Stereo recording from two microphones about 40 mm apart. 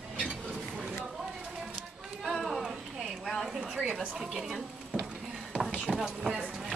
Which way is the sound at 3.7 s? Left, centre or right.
Centre.